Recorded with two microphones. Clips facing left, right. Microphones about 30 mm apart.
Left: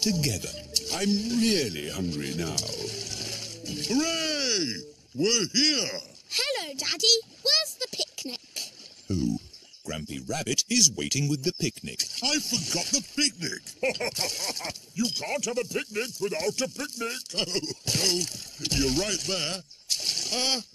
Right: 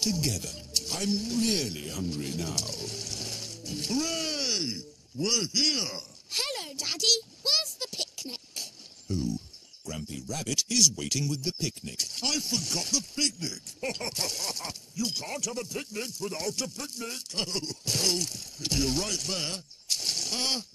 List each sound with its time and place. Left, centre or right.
0.0 s speech: left
3.2 s music: left
5.3 s speech: left
6.3 s a sound: left
9.8 s speech: left